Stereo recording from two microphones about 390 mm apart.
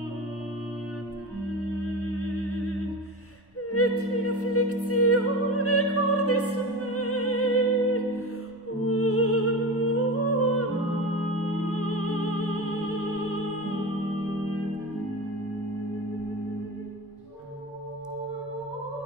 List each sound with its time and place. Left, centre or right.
3.7 s opera: left
7.0 s music: left
9.9 s humming: left
11.1 s music: left